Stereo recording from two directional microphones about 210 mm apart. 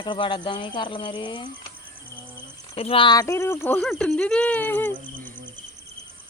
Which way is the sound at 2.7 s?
25° left (ahead or behind).